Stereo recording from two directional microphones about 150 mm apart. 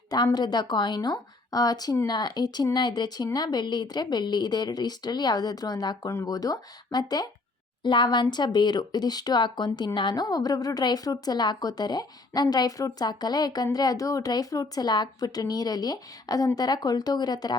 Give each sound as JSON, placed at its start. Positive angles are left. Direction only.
{"t": 0.1, "sound": "speech", "side_deg": 25}